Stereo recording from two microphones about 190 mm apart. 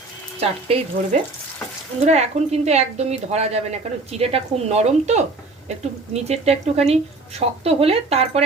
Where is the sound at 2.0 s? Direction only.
35° right (ahead or behind).